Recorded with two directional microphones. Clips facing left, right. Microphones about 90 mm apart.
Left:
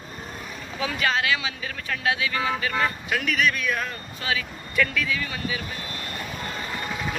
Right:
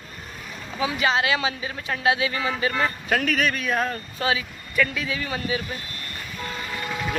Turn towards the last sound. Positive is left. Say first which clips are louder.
# right 1 dB
turn(degrees=20)  # may be behind; listen again after turning